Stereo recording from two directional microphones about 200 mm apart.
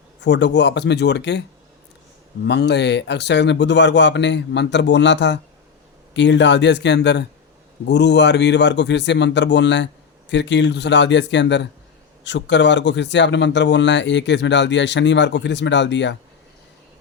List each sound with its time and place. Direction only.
0.2 s speech: 65° left (ahead or behind)
2.5 s speech: 60° left (ahead or behind)